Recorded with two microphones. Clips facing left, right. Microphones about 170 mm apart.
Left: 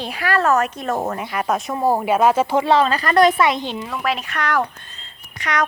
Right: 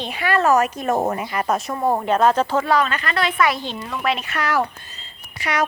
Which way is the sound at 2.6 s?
30° left (ahead or behind).